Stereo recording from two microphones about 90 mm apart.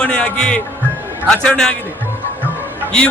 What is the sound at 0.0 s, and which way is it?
A man's voice, 15° left (ahead or behind).